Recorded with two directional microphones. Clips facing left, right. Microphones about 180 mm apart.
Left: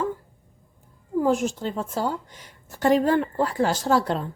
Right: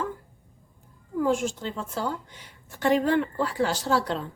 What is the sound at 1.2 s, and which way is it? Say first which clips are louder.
A woman's voice: left 2 dB; 40° left (ahead or behind).